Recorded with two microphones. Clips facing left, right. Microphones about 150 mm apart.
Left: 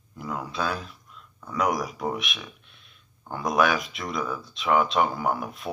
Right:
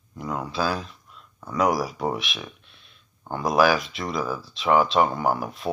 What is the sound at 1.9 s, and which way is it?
Speech, 30° right (ahead or behind).